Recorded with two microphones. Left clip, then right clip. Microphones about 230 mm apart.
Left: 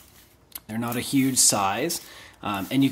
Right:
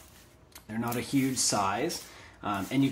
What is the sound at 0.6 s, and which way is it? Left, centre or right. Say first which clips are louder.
Speech: left 4 dB; left.